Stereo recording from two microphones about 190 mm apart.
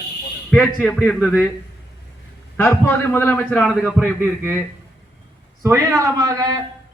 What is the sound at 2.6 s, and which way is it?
A man's voice, 15° left (ahead or behind).